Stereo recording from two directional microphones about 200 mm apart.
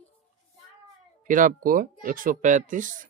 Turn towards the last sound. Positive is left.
turn(degrees=-40)  # may be behind; listen again after turning